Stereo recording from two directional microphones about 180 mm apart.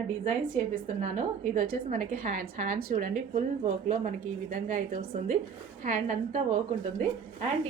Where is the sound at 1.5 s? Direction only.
45° right (ahead or behind).